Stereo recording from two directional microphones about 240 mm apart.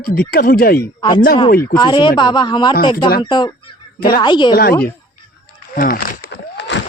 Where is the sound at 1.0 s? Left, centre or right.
Centre.